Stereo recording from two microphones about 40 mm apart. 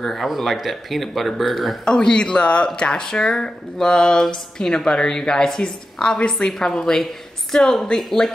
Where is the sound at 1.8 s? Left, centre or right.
Left.